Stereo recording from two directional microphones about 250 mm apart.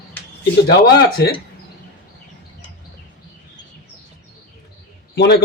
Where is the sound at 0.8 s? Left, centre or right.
Left.